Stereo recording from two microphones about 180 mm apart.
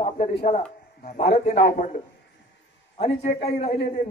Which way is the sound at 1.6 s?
50° left (ahead or behind).